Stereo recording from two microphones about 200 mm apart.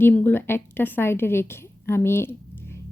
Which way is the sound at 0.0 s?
10° left (ahead or behind).